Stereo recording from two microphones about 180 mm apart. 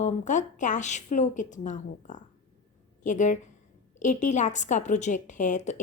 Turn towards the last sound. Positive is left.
turn(degrees=40)  # may be behind; listen again after turning